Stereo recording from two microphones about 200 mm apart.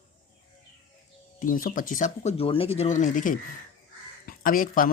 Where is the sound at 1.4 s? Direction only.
40° left (ahead or behind).